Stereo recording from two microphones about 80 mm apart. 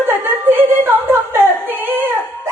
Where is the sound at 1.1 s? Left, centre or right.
Right.